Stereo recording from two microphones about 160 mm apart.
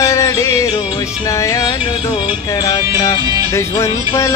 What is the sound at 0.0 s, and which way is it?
Music, 20° left (ahead or behind).